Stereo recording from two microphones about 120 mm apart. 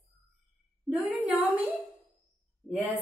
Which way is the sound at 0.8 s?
10° right (ahead or behind).